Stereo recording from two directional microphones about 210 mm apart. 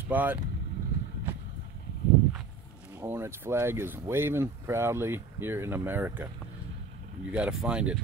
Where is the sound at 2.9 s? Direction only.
10° right (ahead or behind).